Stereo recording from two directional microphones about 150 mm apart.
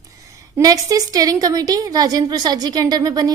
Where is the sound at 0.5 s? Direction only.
25° right (ahead or behind).